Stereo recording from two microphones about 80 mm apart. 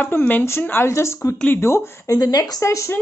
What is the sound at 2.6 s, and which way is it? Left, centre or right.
Speech, left.